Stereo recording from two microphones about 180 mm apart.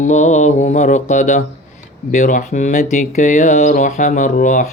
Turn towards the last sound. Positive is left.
turn(degrees=45)  # may be behind; listen again after turning